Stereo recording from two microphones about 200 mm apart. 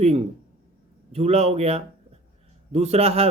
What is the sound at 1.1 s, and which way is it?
Speech, 30° right (ahead or behind).